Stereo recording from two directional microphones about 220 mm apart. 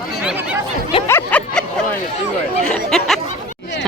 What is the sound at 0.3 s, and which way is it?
Speech, 5° right (ahead or behind).